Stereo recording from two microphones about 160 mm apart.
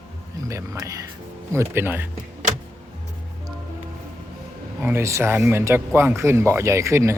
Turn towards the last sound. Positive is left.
turn(degrees=-20)  # may be behind; listen again after turning